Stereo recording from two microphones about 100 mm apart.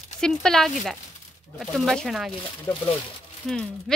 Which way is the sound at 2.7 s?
20° left (ahead or behind).